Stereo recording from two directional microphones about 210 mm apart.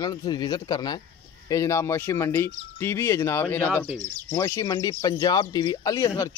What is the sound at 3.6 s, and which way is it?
Speech, 10° right (ahead or behind).